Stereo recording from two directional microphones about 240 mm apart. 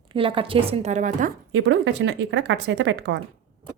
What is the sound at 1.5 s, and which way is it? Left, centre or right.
Speech, right.